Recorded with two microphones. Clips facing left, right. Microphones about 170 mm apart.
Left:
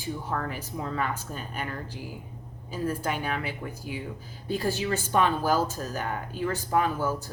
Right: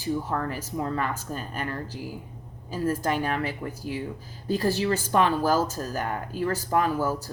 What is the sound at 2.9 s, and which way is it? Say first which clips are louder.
Speech: right 4 dB; 40° right (ahead or behind).